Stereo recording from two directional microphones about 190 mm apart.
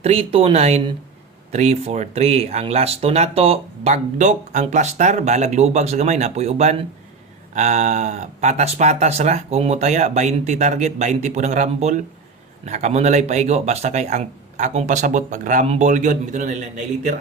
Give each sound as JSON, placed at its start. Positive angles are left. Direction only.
{"t": 0.0, "sound": "speech", "side_deg": -30}